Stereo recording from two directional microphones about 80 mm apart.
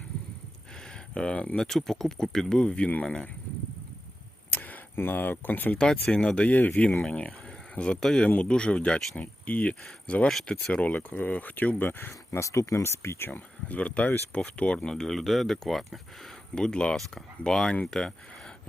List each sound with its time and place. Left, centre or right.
0.8 s speech: centre
4.5 s speech: left
5.7 s speech: centre
10.2 s speech: centre